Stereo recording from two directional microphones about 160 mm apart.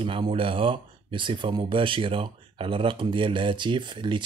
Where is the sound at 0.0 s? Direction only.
35° right (ahead or behind).